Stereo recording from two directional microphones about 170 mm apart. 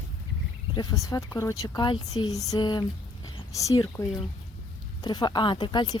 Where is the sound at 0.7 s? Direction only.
20° left (ahead or behind).